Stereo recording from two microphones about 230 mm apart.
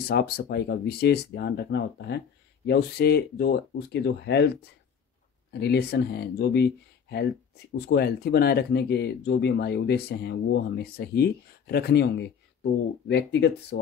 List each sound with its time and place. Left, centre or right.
0.1 s speech: left